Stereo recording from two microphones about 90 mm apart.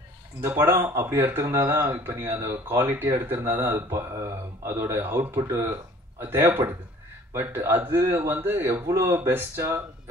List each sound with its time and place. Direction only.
0.5 s speech: 25° right (ahead or behind)
2.0 s speech: 25° right (ahead or behind)